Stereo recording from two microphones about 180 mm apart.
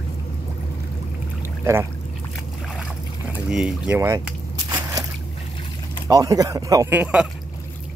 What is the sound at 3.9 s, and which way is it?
Speech, 15° right (ahead or behind).